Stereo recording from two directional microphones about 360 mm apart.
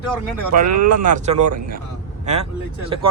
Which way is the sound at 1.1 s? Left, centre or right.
Centre.